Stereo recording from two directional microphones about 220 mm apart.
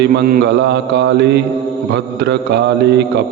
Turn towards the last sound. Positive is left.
turn(degrees=-50)  # may be behind; listen again after turning